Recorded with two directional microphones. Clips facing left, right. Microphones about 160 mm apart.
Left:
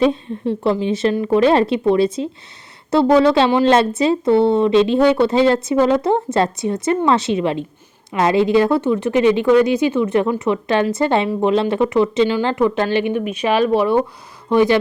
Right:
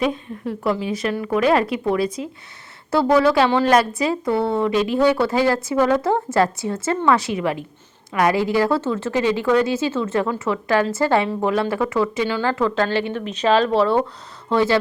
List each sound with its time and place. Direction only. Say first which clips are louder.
0.0 s speech: left 6 dB; 25° left (ahead or behind)